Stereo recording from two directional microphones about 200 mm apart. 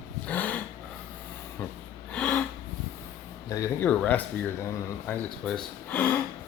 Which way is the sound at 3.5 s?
15° left (ahead or behind).